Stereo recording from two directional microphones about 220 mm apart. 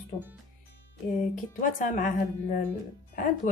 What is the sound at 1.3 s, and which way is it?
Speech, 35° left (ahead or behind).